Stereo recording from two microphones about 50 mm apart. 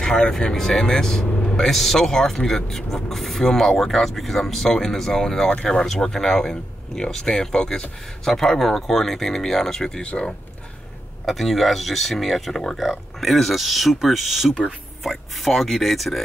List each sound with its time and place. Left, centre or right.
0.0 s speech: centre
10.0 s speech: centre
11.2 s speech: centre